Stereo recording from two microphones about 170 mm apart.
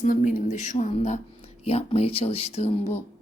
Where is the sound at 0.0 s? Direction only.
50° left (ahead or behind).